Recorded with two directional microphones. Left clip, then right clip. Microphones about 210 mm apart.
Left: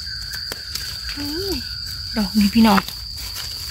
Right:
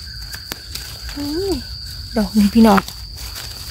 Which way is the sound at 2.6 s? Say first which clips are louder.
Right 4 dB; 60° right (ahead or behind).